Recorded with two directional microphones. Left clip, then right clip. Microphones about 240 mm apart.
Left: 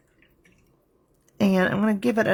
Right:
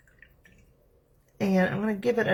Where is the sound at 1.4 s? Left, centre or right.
Left.